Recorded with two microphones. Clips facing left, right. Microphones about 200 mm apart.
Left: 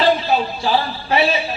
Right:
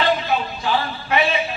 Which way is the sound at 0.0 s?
35° left (ahead or behind).